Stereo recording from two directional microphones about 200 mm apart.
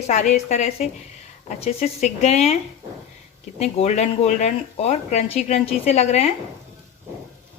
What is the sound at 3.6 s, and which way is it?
Speech, 30° left (ahead or behind).